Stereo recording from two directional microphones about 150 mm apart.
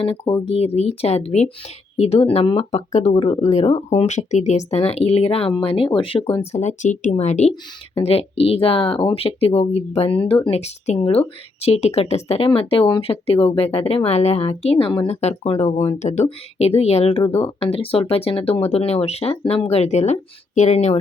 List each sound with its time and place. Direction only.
0.0 s speech: 40° left (ahead or behind)
6.5 s speech: 50° left (ahead or behind)